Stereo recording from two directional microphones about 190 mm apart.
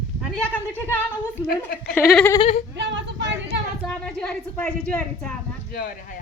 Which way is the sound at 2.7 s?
65° right (ahead or behind).